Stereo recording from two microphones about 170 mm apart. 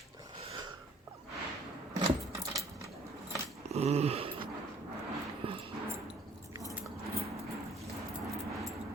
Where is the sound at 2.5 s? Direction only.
20° right (ahead or behind).